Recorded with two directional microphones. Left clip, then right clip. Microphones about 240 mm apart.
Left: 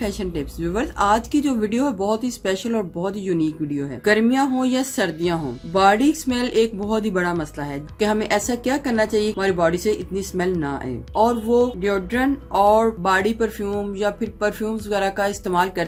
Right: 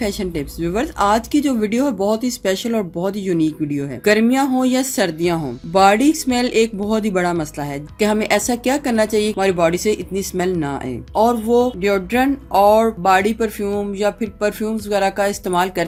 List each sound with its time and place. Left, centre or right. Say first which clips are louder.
0.0 s a woman's voice: right 4 dB; right